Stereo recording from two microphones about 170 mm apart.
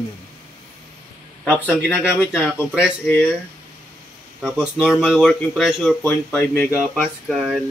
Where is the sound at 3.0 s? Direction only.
10° left (ahead or behind).